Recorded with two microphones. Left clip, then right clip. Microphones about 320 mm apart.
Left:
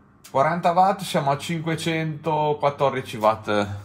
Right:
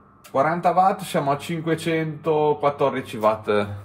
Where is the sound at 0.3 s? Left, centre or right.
Left.